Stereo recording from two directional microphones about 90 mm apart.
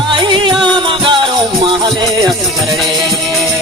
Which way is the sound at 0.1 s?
55° right (ahead or behind).